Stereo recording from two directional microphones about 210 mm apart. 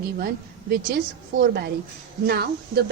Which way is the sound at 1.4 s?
50° right (ahead or behind).